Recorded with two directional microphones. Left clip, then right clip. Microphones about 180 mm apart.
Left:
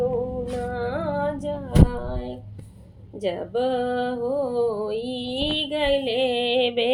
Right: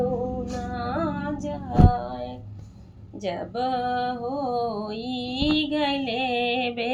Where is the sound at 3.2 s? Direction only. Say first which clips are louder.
Left 3 dB; 45° left (ahead or behind).